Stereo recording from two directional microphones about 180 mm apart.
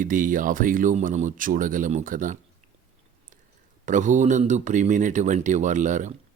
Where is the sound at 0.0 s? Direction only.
45° right (ahead or behind).